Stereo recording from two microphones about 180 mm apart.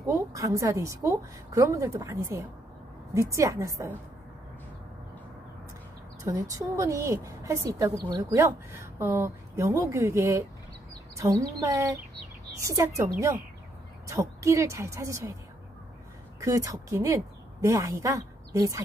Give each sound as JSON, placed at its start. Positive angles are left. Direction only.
{"t": 0.0, "sound": "a woman's voice", "side_deg": -15}
{"t": 6.2, "sound": "a woman's voice", "side_deg": -20}
{"t": 16.3, "sound": "a woman's voice", "side_deg": -20}